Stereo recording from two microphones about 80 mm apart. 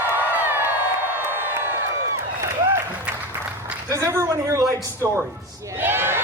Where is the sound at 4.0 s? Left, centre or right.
Right.